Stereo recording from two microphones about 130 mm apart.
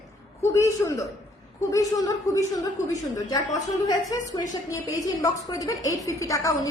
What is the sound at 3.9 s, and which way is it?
A woman's voice, 30° left (ahead or behind).